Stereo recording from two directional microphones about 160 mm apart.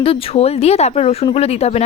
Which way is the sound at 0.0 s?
40° left (ahead or behind).